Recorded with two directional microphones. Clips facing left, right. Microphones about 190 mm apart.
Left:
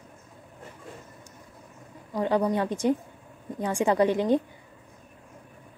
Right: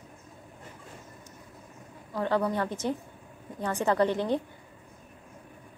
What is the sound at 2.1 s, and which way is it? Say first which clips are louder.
A woman's voice: left 3 dB; 15° left (ahead or behind).